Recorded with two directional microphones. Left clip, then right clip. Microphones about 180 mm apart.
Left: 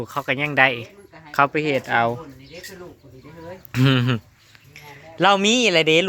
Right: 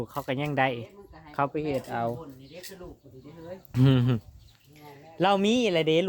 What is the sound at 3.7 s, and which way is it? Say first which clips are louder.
Speech: left 6 dB; 10° right (ahead or behind).